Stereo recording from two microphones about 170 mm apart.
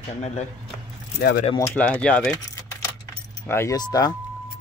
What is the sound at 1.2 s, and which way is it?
Speech, 70° left (ahead or behind).